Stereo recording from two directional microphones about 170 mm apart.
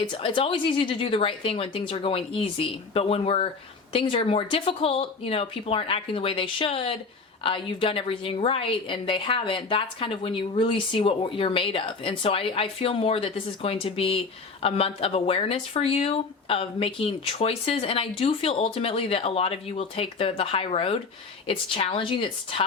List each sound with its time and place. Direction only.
0.1 s a woman's voice: 30° left (ahead or behind)